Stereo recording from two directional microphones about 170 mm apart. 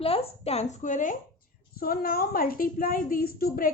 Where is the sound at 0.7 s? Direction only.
50° left (ahead or behind).